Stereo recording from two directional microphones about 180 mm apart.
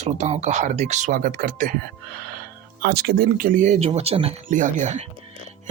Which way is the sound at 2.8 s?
60° right (ahead or behind).